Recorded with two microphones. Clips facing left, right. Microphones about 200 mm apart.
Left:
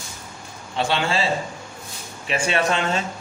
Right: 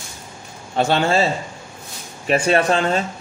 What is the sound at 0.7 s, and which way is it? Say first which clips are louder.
A man's voice: right 5 dB; 45° right (ahead or behind).